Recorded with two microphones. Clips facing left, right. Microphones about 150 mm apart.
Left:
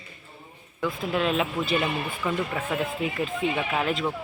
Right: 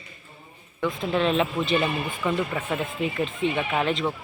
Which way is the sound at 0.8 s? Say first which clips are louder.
Right 2 dB; 5° left (ahead or behind).